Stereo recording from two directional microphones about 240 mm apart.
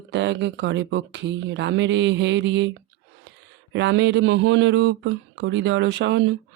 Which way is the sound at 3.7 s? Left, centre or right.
Right.